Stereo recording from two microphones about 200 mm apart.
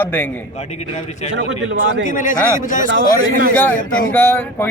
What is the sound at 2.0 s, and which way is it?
Speech, 40° left (ahead or behind).